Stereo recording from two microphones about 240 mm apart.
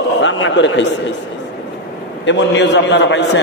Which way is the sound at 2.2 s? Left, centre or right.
Left.